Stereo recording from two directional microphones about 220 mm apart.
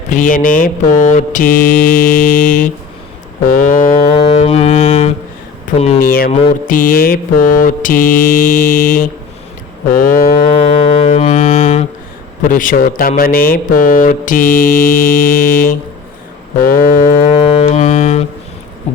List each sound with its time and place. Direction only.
0.1 s speech: 35° left (ahead or behind)
4.1 s music: 25° left (ahead or behind)
5.7 s speech: 30° left (ahead or behind)
10.5 s music: 25° left (ahead or behind)
12.4 s speech: 35° left (ahead or behind)
17.3 s music: 25° left (ahead or behind)
18.9 s heart murmur: 30° left (ahead or behind)